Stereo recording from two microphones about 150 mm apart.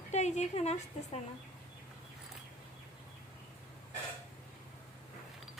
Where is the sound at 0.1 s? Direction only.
50° left (ahead or behind).